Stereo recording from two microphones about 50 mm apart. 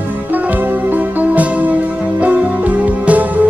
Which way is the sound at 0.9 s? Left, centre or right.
Right.